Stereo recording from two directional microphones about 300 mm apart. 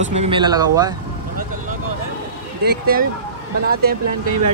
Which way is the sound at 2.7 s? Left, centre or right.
Right.